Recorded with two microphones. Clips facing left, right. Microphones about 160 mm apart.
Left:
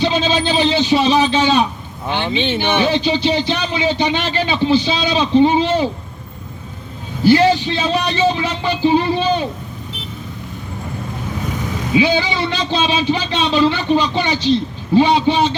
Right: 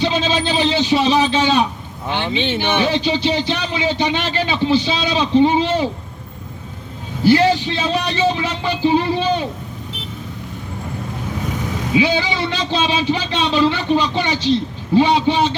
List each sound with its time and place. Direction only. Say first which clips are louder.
0.0 s a man's voice: left 2 dB; 30° left (ahead or behind)
7.3 s a man's voice: left 1 dB; 30° left (ahead or behind)
11.9 s a man's voice: left 2 dB; 30° left (ahead or behind)